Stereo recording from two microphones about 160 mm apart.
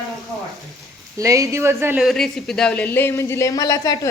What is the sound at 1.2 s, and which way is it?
Speech, 20° right (ahead or behind).